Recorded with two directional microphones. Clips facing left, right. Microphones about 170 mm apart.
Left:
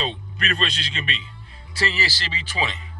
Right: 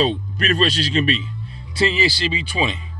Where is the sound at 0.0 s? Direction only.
40° right (ahead or behind).